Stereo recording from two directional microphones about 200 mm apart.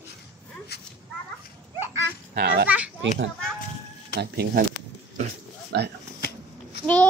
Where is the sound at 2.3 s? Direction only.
50° right (ahead or behind).